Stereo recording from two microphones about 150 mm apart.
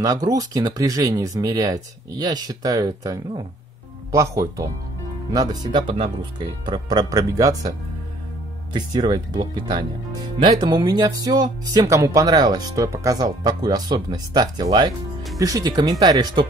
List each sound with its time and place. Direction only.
0.0 s speech: 25° right (ahead or behind)
5.3 s speech: 25° right (ahead or behind)
8.7 s speech: 25° right (ahead or behind)